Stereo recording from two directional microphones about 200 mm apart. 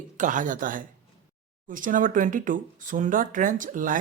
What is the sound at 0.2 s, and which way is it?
Speech, 40° right (ahead or behind).